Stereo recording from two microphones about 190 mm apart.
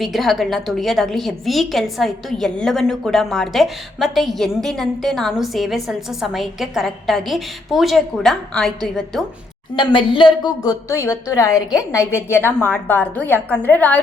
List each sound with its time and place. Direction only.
0.0 s a woman's voice: centre (ahead or behind)
9.7 s a woman's voice: 25° left (ahead or behind); by 14.0 s 10° left (ahead or behind)